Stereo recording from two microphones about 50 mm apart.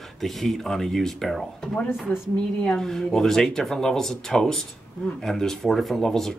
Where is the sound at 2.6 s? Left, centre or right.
Centre.